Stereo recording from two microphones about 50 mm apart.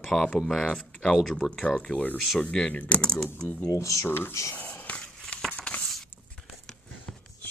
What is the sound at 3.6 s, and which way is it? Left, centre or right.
Speech, left.